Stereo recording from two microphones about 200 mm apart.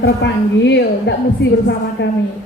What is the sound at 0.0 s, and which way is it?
A woman's voice, 60° left (ahead or behind).